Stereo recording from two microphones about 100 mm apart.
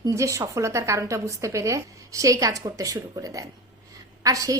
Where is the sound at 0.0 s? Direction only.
35° right (ahead or behind).